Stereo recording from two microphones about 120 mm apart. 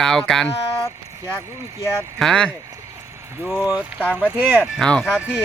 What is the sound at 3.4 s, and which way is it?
Speech, 5° right (ahead or behind).